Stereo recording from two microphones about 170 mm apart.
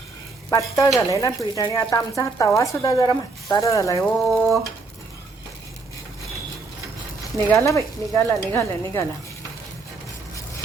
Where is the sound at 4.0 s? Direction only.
Centre (ahead or behind).